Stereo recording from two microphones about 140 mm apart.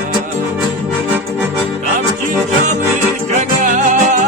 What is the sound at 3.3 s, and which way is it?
Music, 60° right (ahead or behind).